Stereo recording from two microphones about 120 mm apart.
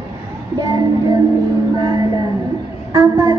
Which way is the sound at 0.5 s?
30° right (ahead or behind).